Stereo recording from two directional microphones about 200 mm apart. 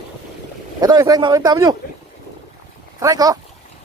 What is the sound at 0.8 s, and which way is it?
Speech, 20° right (ahead or behind).